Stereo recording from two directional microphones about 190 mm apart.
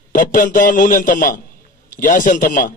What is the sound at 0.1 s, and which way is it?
A man's voice, 45° left (ahead or behind).